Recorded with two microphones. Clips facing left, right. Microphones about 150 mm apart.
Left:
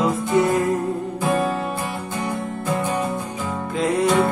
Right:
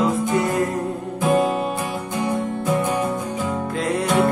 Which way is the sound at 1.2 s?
20° right (ahead or behind).